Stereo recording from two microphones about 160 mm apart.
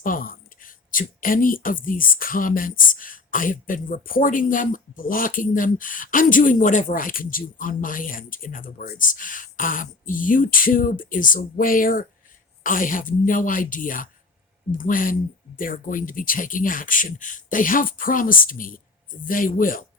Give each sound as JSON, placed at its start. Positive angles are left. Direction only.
{"t": 0.0, "sound": "speech", "side_deg": 60}